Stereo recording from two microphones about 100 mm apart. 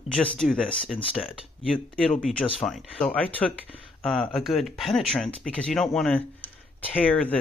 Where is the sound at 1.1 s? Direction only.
5° right (ahead or behind).